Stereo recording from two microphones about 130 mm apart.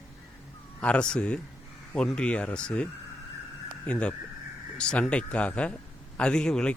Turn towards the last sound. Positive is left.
turn(degrees=5)  # may be behind; listen again after turning